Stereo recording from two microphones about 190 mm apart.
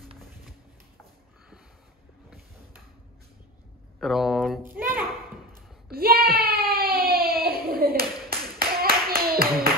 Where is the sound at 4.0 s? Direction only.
Centre (ahead or behind).